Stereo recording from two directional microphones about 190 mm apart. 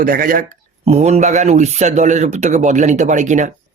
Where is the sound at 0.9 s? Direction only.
35° right (ahead or behind).